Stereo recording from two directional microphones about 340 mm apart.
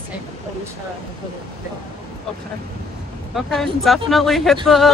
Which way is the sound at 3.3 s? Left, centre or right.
Centre.